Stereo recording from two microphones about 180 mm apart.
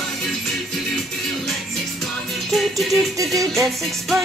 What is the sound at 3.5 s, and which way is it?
Music, centre (ahead or behind).